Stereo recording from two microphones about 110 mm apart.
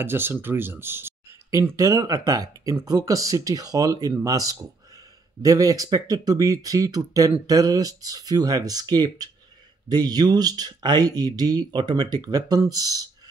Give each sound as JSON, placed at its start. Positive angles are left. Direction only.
{"t": 0.0, "sound": "speech", "side_deg": -20}